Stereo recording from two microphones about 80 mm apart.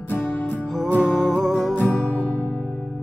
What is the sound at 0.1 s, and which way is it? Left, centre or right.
Music, left.